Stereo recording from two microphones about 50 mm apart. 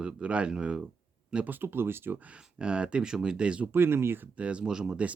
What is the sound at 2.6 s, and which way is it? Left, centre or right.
Speech, centre.